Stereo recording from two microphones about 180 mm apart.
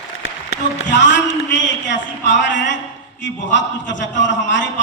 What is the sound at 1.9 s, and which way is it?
A man's voice, 85° left.